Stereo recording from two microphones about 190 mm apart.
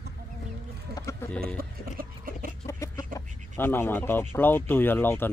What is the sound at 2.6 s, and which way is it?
Chicken, 15° left (ahead or behind).